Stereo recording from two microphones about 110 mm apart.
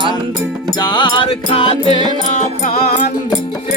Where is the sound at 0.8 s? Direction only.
50° left (ahead or behind).